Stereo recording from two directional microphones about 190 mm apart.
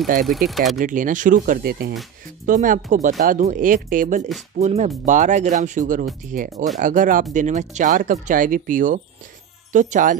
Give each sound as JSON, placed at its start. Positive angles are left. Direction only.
{"t": 0.0, "sound": "speech", "side_deg": -50}
{"t": 0.3, "sound": "speech", "side_deg": 0}
{"t": 0.7, "sound": "speech", "side_deg": -45}